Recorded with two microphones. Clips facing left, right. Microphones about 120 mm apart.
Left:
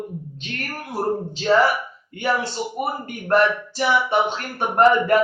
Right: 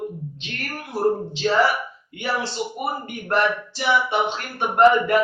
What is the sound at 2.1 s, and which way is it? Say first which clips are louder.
A man's voice: left 3 dB; 45° left (ahead or behind).